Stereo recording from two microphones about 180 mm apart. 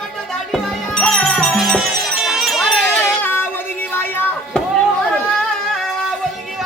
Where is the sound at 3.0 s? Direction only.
10° left (ahead or behind).